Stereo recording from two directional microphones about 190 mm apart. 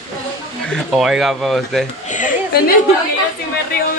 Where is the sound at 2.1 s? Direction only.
45° left (ahead or behind).